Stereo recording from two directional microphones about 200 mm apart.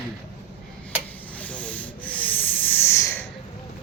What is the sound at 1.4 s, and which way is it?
Sanding, 5° left (ahead or behind).